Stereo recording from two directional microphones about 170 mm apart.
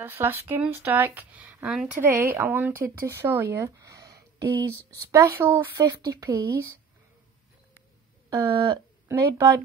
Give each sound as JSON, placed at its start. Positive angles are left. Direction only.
{"t": 0.0, "sound": "speech", "side_deg": -15}
{"t": 8.3, "sound": "a woman's voice", "side_deg": -25}